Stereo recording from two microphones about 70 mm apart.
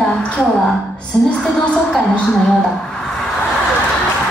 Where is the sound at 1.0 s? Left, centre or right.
Centre.